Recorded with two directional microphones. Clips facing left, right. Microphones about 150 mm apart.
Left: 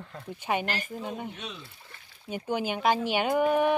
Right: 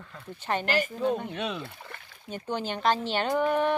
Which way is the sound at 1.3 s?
65° right (ahead or behind).